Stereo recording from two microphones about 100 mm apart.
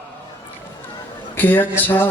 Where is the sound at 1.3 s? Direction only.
20° left (ahead or behind).